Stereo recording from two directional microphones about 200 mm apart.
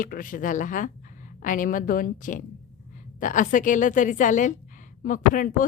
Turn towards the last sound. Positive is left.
turn(degrees=40)  # may be behind; listen again after turning